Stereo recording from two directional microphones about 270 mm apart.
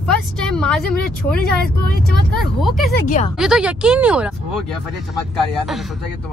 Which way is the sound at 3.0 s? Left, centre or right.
Left.